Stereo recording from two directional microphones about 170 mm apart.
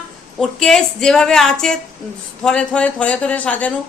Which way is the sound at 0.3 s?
5° left (ahead or behind).